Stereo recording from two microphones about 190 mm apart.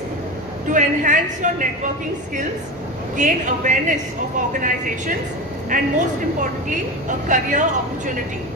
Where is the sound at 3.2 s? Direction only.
40° right (ahead or behind).